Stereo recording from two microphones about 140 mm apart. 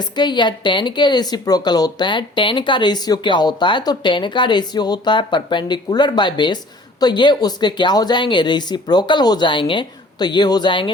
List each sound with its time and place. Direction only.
0.0 s speech: 30° left (ahead or behind)